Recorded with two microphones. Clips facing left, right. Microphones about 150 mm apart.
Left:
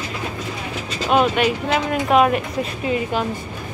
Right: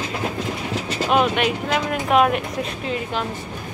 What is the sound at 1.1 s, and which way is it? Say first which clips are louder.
Speech: left 2 dB; centre (ahead or behind).